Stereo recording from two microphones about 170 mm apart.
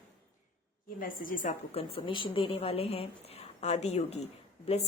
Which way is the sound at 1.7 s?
35° left (ahead or behind).